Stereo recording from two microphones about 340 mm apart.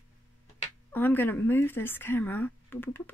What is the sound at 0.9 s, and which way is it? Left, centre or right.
Speech, centre.